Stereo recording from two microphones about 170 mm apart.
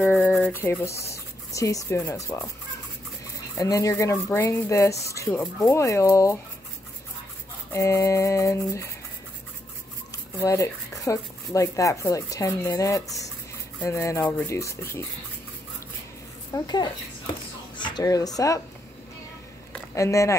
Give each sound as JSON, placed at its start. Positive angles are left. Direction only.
{"t": 0.0, "sound": "rub", "side_deg": 10}
{"t": 0.5, "sound": "speech", "side_deg": 15}
{"t": 3.5, "sound": "speech", "side_deg": 20}
{"t": 7.7, "sound": "speech", "side_deg": 15}
{"t": 10.4, "sound": "speech", "side_deg": 20}
{"t": 16.5, "sound": "speech", "side_deg": 25}
{"t": 19.7, "sound": "a sound", "side_deg": 15}